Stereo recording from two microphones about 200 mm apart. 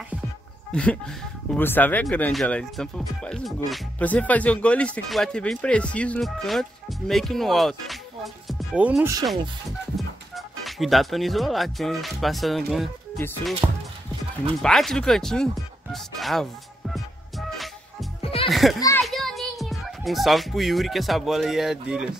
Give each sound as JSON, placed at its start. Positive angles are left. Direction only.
{"t": 0.7, "sound": "speech", "side_deg": 5}
{"t": 13.6, "sound": "speech", "side_deg": -20}
{"t": 14.6, "sound": "speech", "side_deg": 0}
{"t": 18.2, "sound": "music", "side_deg": 30}
{"t": 18.5, "sound": "children playing", "side_deg": 0}
{"t": 19.0, "sound": "a child's voice", "side_deg": 0}